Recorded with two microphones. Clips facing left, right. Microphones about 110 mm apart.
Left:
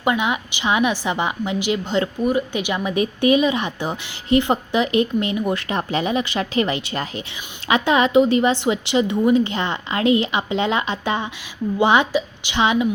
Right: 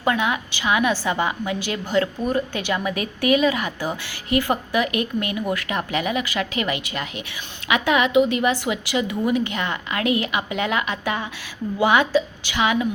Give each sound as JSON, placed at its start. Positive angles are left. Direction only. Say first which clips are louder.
{"t": 0.0, "sound": "a woman's voice", "louder": "left 1 dB", "side_deg": 20}